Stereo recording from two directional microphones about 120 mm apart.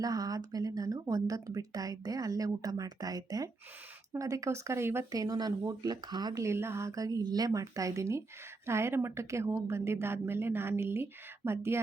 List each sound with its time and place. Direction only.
0.0 s speech: 30° right (ahead or behind)